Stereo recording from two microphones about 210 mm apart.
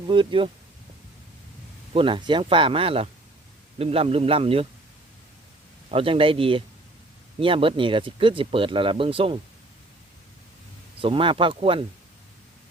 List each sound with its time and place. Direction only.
0.1 s speech: 25° right (ahead or behind)
1.9 s speech: 25° right (ahead or behind)
5.9 s speech: 25° right (ahead or behind)
11.0 s speech: 25° right (ahead or behind)